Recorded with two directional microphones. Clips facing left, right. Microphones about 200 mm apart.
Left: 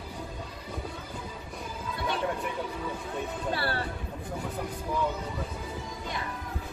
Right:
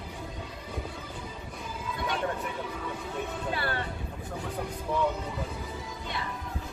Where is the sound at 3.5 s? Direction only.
35° left (ahead or behind).